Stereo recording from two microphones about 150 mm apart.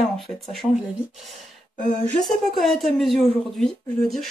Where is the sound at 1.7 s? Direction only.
60° left (ahead or behind).